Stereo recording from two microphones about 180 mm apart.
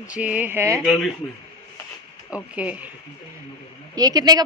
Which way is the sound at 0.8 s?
Centre (ahead or behind).